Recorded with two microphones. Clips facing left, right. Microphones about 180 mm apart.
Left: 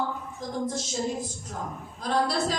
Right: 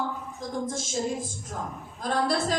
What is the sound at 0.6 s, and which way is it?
A woman's voice, 50° right (ahead or behind).